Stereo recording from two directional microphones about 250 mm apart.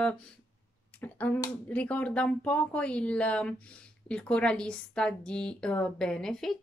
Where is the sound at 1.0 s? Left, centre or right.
Centre.